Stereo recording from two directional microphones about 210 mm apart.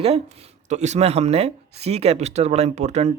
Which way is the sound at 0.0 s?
30° right (ahead or behind).